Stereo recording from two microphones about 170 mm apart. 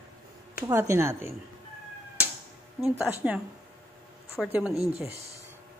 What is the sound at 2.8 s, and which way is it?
Speech, 5° right (ahead or behind).